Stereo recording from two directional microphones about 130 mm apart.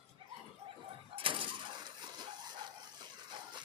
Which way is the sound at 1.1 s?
40° right (ahead or behind).